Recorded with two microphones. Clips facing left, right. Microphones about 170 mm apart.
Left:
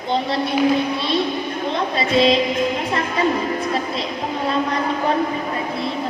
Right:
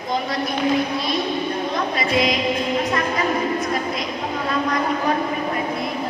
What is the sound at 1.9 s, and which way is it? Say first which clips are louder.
Music: left 5 dB; 30° left (ahead or behind).